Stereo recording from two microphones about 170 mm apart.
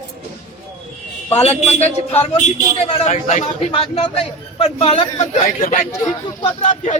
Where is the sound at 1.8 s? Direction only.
40° left (ahead or behind).